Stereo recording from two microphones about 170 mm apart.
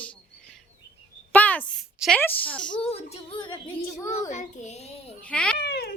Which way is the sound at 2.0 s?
10° left (ahead or behind).